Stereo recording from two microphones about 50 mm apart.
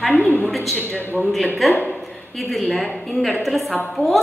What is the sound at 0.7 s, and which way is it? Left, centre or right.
Speech, left.